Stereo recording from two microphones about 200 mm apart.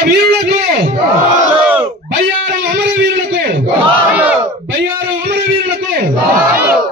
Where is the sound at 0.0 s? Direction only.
50° right (ahead or behind).